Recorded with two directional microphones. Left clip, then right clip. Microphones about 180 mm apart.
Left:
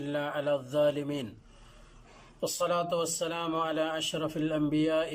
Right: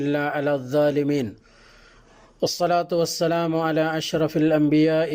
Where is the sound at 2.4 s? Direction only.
35° right (ahead or behind).